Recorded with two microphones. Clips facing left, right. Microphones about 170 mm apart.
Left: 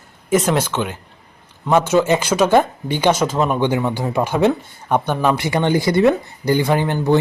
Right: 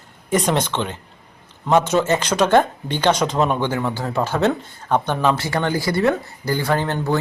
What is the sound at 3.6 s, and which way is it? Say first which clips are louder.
Speech: left 4 dB; 15° left (ahead or behind).